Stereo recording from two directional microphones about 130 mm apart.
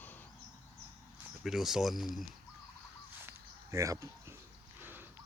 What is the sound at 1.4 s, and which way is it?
Speech, 5° right (ahead or behind).